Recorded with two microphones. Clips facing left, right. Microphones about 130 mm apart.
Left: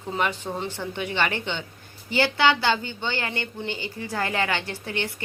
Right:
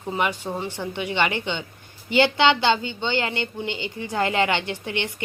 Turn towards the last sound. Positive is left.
turn(degrees=-15)  # may be behind; listen again after turning